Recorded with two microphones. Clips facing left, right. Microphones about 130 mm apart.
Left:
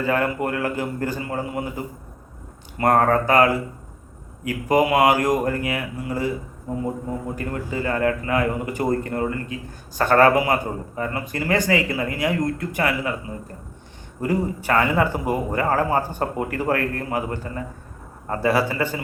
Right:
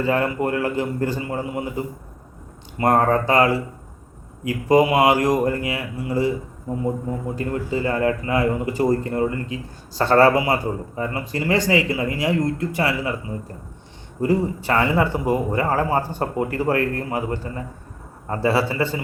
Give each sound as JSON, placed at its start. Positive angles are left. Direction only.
{"t": 0.0, "sound": "speech", "side_deg": -25}
{"t": 2.7, "sound": "speech", "side_deg": -25}
{"t": 7.3, "sound": "speech", "side_deg": -25}
{"t": 14.2, "sound": "speech", "side_deg": -30}